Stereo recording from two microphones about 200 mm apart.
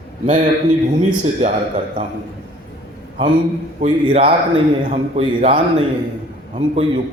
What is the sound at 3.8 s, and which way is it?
Speech, 30° right (ahead or behind).